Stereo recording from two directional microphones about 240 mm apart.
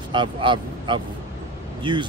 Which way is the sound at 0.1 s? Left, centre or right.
Centre.